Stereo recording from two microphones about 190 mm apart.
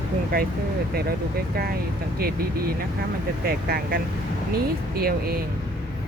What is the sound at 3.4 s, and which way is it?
Speech, 50° right (ahead or behind).